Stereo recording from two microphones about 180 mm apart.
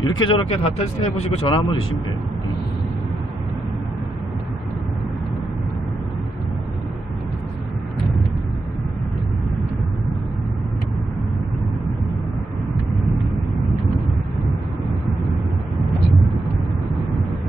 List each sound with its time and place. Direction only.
0.2 s speech: 30° left (ahead or behind)